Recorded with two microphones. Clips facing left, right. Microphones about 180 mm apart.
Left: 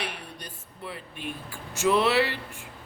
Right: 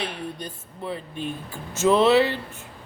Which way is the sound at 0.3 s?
25° right (ahead or behind).